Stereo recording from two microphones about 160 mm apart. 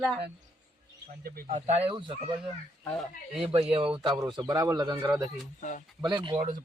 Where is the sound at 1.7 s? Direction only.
35° right (ahead or behind).